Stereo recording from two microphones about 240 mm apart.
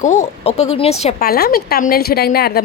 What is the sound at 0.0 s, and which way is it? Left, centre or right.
A woman's voice, left.